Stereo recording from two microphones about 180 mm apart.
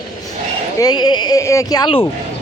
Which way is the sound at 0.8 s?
20° left (ahead or behind).